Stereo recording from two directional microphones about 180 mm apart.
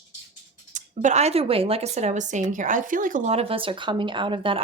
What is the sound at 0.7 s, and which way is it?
Speech, 45° right (ahead or behind).